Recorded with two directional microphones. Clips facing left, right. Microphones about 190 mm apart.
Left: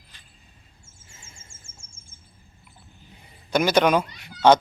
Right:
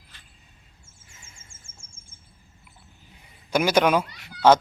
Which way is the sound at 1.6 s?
55° right (ahead or behind).